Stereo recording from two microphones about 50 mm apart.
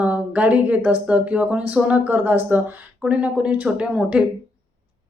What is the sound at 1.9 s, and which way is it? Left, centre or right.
Speech, right.